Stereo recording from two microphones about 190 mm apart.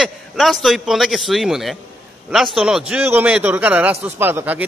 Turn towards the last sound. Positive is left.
turn(degrees=-10)  # may be behind; listen again after turning